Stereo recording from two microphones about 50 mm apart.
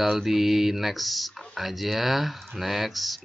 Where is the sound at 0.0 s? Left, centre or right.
Centre.